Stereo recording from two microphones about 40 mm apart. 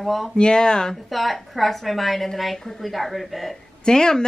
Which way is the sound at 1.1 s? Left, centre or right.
Centre.